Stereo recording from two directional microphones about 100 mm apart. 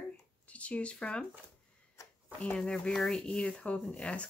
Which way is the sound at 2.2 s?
10° left (ahead or behind).